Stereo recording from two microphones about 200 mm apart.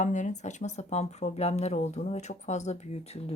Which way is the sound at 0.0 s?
40° left (ahead or behind).